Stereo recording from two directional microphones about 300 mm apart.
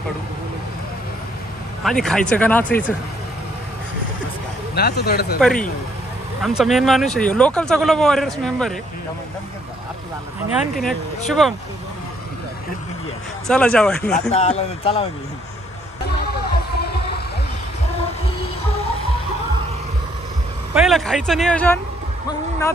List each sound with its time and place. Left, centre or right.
1.9 s speech: centre
4.7 s speech: left
5.4 s speech: centre
10.7 s speech: centre
13.5 s speech: centre
14.3 s speech: left
16.7 s heart murmur: left
20.7 s speech: centre